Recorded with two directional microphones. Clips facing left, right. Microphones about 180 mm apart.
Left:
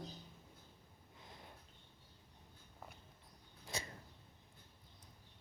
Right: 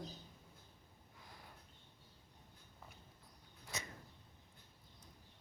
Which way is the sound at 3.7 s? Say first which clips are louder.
Left 2 dB; 30° left (ahead or behind).